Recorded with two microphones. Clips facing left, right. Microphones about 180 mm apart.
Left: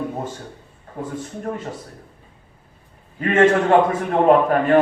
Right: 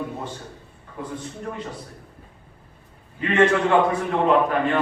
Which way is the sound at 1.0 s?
45° left (ahead or behind).